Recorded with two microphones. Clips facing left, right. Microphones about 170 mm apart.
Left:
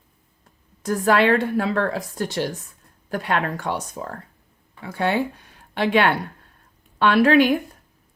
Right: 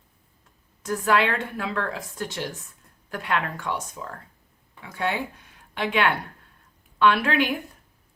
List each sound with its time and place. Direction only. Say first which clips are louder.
0.8 s speech: left 4 dB; 40° left (ahead or behind)